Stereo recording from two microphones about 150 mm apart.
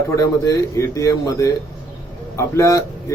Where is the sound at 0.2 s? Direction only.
20° left (ahead or behind).